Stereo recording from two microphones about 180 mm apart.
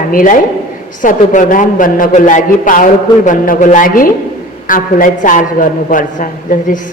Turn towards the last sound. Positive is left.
turn(degrees=50)  # may be behind; listen again after turning